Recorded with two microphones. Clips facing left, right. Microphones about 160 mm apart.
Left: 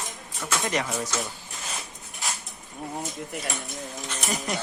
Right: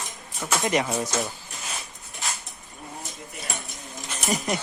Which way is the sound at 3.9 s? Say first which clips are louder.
Right 4 dB; 5° right (ahead or behind).